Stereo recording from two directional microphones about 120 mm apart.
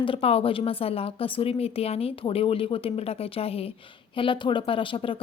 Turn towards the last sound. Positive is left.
turn(degrees=50)  # may be behind; listen again after turning